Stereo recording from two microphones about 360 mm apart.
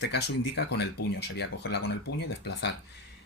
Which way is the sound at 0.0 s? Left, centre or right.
Left.